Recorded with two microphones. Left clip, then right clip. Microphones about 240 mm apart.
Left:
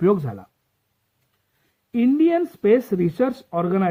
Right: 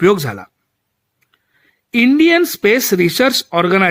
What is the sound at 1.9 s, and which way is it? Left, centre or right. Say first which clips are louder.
Speech: right 7 dB; right.